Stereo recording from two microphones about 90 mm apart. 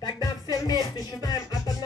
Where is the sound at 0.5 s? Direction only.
45° left (ahead or behind).